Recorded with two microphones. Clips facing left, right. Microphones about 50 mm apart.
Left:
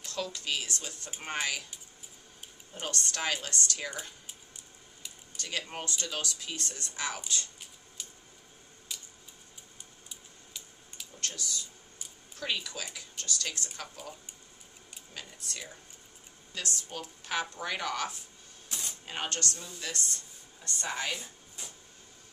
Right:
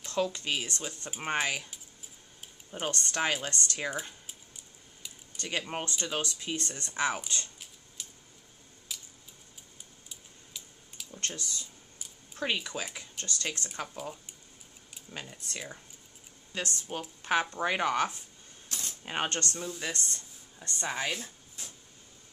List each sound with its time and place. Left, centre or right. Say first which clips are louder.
0.0 s speech: right 6 dB; right
2.9 s speech: right 2 dB; right
5.7 s speech: right 3 dB; right
8.0 s a sound: even; centre
11.1 s speech: right 1 dB; right
15.1 s speech: right 3 dB; right
18.7 s coin: even; centre
19.0 s speech: right 3 dB; right
20.8 s speech: right 2 dB; centre
21.1 s a sound: right 1 dB; centre